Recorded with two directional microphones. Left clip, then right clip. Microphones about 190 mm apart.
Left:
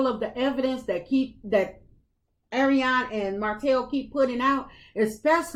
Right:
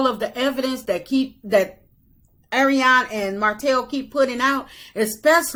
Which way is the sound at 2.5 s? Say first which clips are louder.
Right 7 dB; 20° right (ahead or behind).